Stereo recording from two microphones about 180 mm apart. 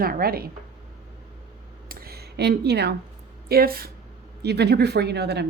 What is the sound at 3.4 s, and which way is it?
Speech, 55° right (ahead or behind).